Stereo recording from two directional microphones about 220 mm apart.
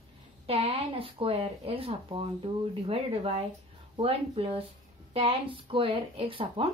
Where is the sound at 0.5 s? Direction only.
25° right (ahead or behind).